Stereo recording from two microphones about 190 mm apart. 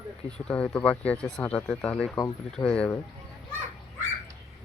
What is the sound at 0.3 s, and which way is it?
Speech, 5° left (ahead or behind).